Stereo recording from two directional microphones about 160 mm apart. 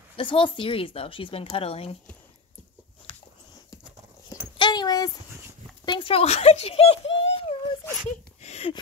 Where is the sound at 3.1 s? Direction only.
30° left (ahead or behind).